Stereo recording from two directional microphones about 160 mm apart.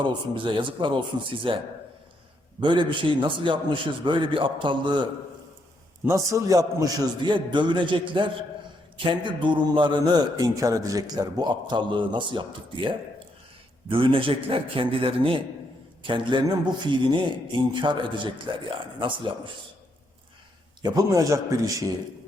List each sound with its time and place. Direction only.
0.0 s a man's voice: 30° right (ahead or behind)
6.1 s a man's voice: 20° right (ahead or behind)
20.8 s a man's voice: 25° right (ahead or behind)